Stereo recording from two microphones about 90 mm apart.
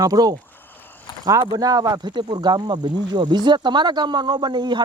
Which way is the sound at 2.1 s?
55° right (ahead or behind).